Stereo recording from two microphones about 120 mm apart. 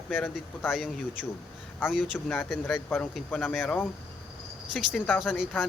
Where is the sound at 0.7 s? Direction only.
Centre (ahead or behind).